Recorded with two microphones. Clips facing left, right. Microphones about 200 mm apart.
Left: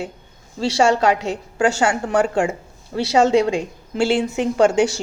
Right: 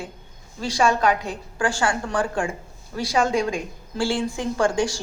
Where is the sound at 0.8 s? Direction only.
75° left (ahead or behind).